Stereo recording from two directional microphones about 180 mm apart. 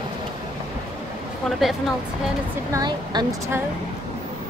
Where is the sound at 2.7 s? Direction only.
20° right (ahead or behind).